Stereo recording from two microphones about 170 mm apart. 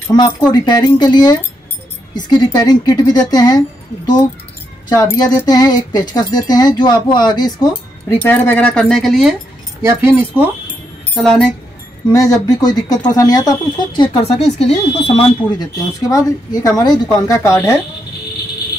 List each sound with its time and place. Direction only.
0.5 s speech: 25° left (ahead or behind); by 9.4 s centre (ahead or behind)
9.8 s speech: 10° right (ahead or behind)
11.1 s speech: 5° left (ahead or behind)
12.1 s speech: 20° left (ahead or behind); by 15.2 s 35° left (ahead or behind)
15.6 s speech: 20° left (ahead or behind)